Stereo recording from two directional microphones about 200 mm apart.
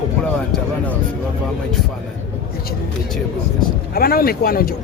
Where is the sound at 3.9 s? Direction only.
50° left (ahead or behind).